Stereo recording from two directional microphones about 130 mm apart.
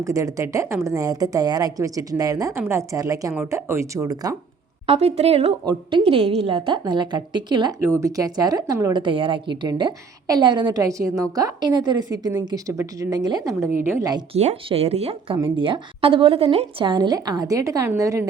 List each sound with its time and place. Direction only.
0.0 s speech: 25° right (ahead or behind)
4.9 s a woman's voice: 50° right (ahead or behind); by 7.8 s 35° right (ahead or behind)
7.8 s speech: 20° right (ahead or behind)
14.3 s speech: 50° right (ahead or behind)
15.5 s a woman's voice: 40° right (ahead or behind); by 18.3 s 25° right (ahead or behind)